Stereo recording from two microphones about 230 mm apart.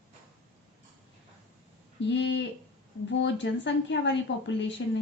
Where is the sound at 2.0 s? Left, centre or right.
Left.